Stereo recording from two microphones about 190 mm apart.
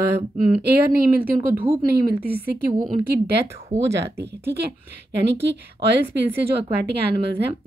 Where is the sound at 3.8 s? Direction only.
65° right (ahead or behind).